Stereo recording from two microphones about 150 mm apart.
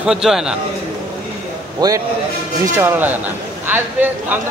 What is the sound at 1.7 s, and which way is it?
Speech, 25° right (ahead or behind).